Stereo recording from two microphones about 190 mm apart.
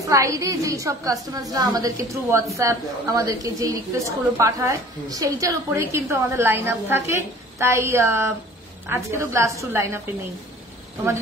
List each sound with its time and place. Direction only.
0.0 s a woman's voice: 15° right (ahead or behind)